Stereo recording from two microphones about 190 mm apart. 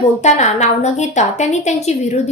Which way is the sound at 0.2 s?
40° left (ahead or behind).